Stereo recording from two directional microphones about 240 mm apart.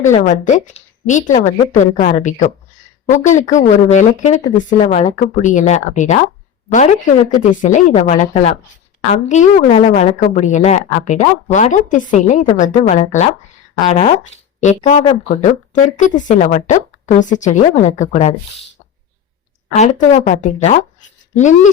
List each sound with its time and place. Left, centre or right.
0.1 s a woman's voice: left
19.7 s a woman's voice: left